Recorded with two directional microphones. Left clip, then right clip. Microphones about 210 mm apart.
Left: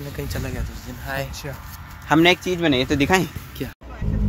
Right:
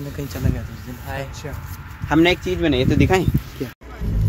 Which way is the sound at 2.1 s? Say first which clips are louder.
Even; 30° left (ahead or behind).